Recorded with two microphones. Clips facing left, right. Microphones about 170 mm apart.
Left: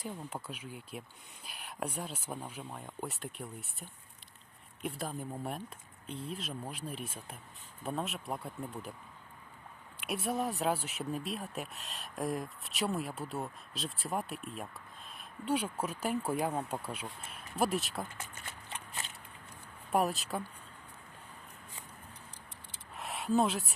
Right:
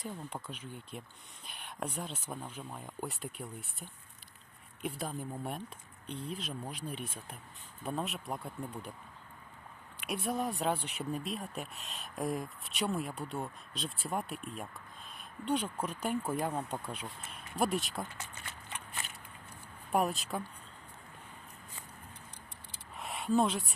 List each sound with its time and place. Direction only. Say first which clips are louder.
0.0 s speech: even; 10° left (ahead or behind)
10.0 s speech: even; centre (ahead or behind)
19.9 s speech: even; centre (ahead or behind)
23.0 s a sound: even; centre (ahead or behind)